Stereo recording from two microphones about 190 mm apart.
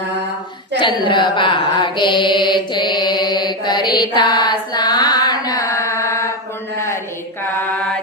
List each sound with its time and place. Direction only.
0.8 s mantra: 25° left (ahead or behind)
6.7 s a sound: 15° left (ahead or behind)
7.4 s mantra: 5° left (ahead or behind)